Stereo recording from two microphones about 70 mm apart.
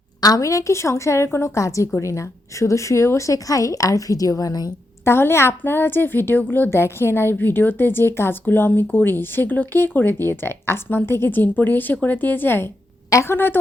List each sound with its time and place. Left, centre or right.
0.2 s speech: left
5.0 s a woman's voice: left